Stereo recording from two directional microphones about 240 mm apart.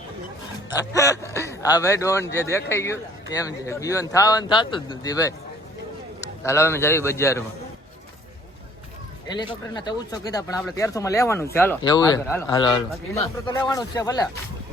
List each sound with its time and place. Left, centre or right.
0.9 s a man's voice: centre
6.4 s a man's voice: centre
9.3 s a man's voice: centre